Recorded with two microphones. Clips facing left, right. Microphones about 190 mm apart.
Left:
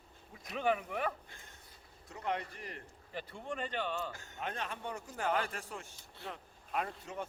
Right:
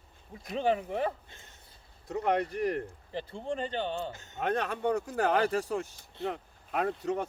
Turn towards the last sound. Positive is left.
turn(degrees=-75)  # may be behind; listen again after turning